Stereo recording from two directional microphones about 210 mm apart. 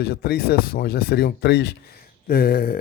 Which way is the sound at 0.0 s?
50° left (ahead or behind).